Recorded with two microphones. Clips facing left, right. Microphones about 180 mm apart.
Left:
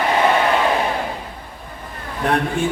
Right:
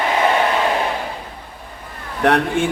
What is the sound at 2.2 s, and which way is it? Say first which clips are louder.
Mantra: right 4 dB; 75° right (ahead or behind).